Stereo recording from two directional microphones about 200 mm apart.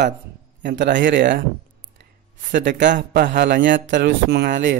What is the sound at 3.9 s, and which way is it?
Speech, 55° right (ahead or behind).